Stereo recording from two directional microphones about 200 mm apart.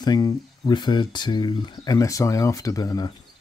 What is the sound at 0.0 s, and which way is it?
Speech, 20° left (ahead or behind).